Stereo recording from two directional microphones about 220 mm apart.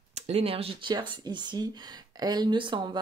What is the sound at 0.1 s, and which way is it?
Speech, 30° right (ahead or behind).